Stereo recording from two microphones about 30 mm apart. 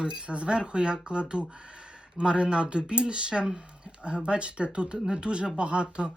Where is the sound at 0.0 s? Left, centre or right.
Right.